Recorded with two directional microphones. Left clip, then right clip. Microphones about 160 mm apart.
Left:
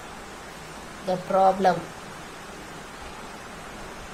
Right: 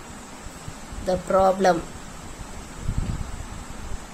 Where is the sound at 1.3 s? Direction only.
50° right (ahead or behind).